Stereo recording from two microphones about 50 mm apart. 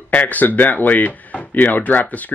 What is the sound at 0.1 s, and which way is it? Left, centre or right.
Speech, left.